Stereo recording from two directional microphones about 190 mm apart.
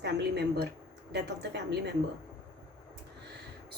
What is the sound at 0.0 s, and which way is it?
A woman's voice, 60° right (ahead or behind).